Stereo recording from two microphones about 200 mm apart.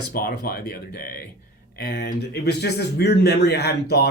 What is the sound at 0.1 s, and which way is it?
A man's voice, 50° left (ahead or behind).